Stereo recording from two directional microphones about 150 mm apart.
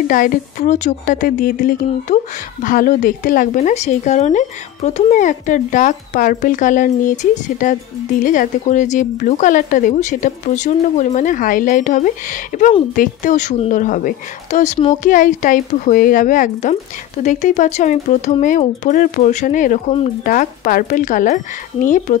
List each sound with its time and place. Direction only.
0.1 s speech: 65° left (ahead or behind)